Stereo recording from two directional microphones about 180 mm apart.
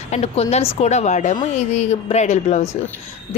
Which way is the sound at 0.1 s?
35° left (ahead or behind).